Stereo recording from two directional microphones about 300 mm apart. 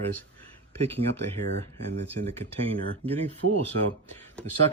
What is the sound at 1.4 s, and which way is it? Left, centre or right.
Speech, right.